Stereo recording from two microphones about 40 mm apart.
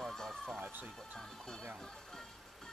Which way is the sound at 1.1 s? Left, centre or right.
Centre.